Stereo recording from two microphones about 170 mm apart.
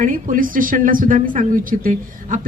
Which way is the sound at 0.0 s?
50° right (ahead or behind).